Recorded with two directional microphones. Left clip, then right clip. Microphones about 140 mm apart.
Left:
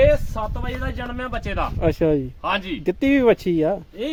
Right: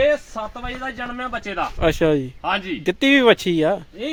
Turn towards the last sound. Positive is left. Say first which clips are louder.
# right 2 dB
turn(degrees=0)  # may be behind; listen again after turning